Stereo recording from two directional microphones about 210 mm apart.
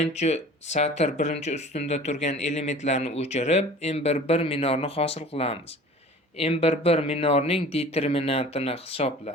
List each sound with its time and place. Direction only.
0.0 s speech: 30° left (ahead or behind)